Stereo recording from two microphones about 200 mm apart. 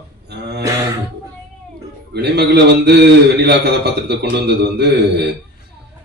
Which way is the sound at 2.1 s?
55° right (ahead or behind).